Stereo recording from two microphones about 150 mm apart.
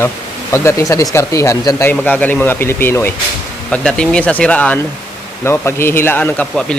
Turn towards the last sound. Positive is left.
turn(degrees=10)  # may be behind; listen again after turning